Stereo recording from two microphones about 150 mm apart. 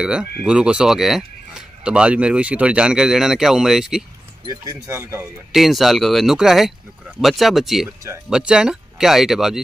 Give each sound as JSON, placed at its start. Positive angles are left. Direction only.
{"t": 0.0, "sound": "speech", "side_deg": -5}
{"t": 4.8, "sound": "speech", "side_deg": -20}
{"t": 5.5, "sound": "speech", "side_deg": 0}